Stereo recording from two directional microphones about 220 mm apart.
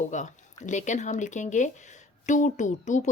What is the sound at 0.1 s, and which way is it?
A woman's voice, 35° left (ahead or behind).